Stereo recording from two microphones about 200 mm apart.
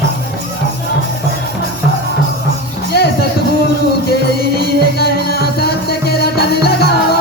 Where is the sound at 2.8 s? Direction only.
50° left (ahead or behind).